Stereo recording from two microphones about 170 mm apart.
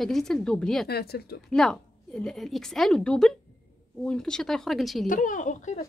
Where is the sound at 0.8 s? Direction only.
65° left (ahead or behind).